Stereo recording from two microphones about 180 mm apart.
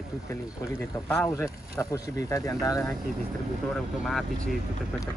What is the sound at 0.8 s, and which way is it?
Speech, 15° left (ahead or behind).